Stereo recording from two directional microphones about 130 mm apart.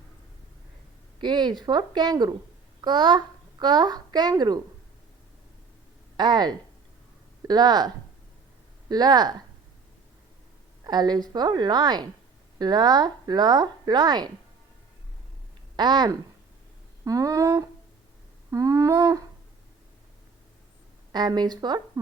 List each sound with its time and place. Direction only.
1.2 s a woman's voice: 35° right (ahead or behind)
6.1 s a woman's voice: 35° right (ahead or behind)
8.9 s a woman's voice: 30° right (ahead or behind)
10.8 s a woman's voice: 35° right (ahead or behind)
15.7 s speech: 35° right (ahead or behind)
21.1 s a woman's voice: 30° right (ahead or behind)